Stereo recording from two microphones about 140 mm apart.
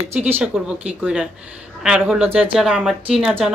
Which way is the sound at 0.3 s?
5° right (ahead or behind).